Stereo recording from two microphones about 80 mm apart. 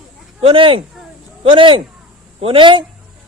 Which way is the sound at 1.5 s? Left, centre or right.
Right.